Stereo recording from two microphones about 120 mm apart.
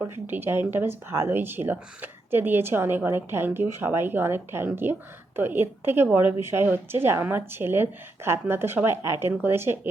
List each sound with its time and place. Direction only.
0.0 s speech: 20° right (ahead or behind)